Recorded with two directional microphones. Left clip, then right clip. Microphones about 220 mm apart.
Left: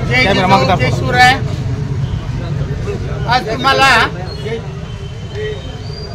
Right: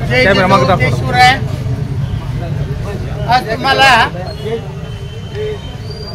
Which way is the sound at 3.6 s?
15° left (ahead or behind).